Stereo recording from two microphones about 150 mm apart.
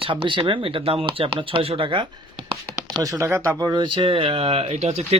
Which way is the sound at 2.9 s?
25° right (ahead or behind).